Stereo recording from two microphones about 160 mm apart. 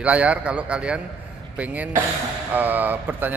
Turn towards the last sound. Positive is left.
turn(degrees=-10)  # may be behind; listen again after turning